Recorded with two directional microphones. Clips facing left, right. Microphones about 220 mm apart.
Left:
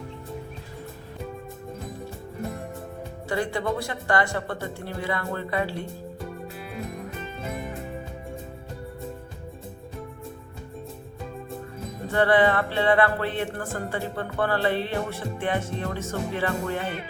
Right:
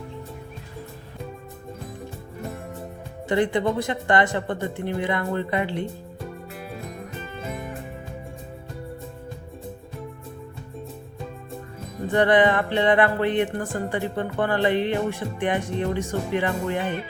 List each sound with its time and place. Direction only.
3.2 s speech: 20° right (ahead or behind)
12.0 s music: 15° right (ahead or behind)